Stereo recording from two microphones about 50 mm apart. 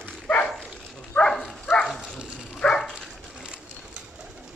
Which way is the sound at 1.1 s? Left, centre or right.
Left.